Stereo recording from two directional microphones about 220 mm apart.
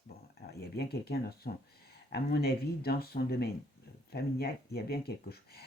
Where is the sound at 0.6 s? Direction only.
45° left (ahead or behind).